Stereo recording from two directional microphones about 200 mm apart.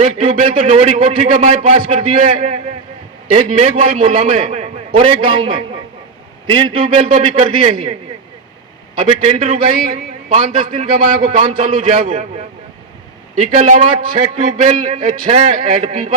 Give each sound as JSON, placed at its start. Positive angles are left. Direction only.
{"t": 0.0, "sound": "a man's voice", "side_deg": -30}
{"t": 9.0, "sound": "a man's voice", "side_deg": -30}
{"t": 13.3, "sound": "a man's voice", "side_deg": -35}